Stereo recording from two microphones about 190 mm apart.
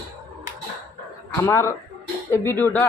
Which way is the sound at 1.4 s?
15° left (ahead or behind).